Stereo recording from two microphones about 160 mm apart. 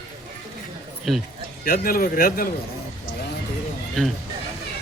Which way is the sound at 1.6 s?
65° left (ahead or behind).